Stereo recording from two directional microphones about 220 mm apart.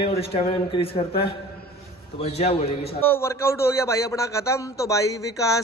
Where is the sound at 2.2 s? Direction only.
30° left (ahead or behind).